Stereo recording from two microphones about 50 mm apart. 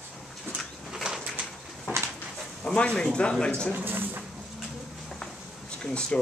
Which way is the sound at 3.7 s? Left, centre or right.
Right.